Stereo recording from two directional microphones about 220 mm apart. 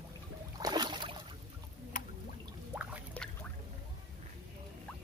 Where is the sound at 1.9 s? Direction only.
35° left (ahead or behind).